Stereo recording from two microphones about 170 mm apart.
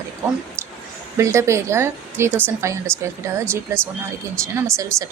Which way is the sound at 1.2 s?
15° right (ahead or behind).